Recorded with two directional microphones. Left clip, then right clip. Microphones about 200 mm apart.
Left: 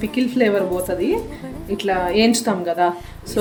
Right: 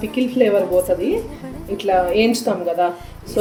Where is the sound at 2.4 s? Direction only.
35° left (ahead or behind).